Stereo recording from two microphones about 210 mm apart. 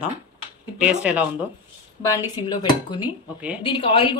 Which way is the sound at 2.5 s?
20° left (ahead or behind).